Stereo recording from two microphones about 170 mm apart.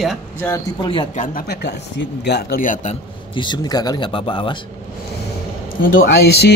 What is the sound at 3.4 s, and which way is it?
Speech, 25° left (ahead or behind).